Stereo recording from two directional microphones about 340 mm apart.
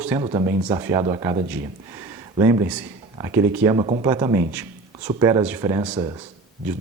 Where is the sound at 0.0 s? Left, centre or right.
Centre.